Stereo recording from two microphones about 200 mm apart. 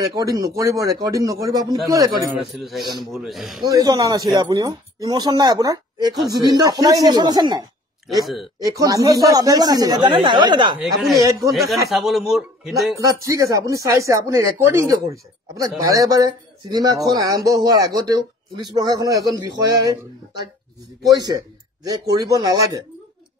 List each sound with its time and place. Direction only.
0.0 s speech: 20° right (ahead or behind)
2.2 s speech: centre (ahead or behind)
2.8 s speech: 20° right (ahead or behind)
3.1 s speech: centre (ahead or behind)
3.6 s speech: 20° right (ahead or behind)
10.8 s speech: centre (ahead or behind)
11.1 s speech: 15° right (ahead or behind)
11.5 s speech: centre (ahead or behind)
13.2 s speech: 15° right (ahead or behind)
21.1 s speech: 20° right (ahead or behind)